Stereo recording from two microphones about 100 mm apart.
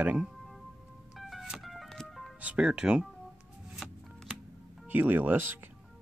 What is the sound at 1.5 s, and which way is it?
Music, centre (ahead or behind).